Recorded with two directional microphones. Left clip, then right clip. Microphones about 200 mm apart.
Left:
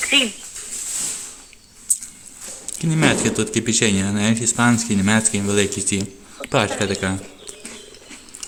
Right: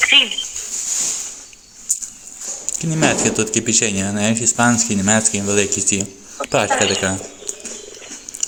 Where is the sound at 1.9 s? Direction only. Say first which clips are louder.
Right 2 dB; 30° left (ahead or behind).